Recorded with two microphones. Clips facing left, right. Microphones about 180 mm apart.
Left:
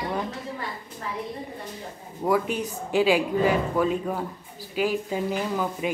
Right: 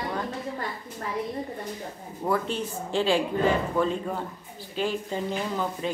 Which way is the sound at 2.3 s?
10° left (ahead or behind).